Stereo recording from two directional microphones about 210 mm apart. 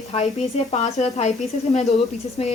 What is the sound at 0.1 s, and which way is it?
Speech, 30° left (ahead or behind).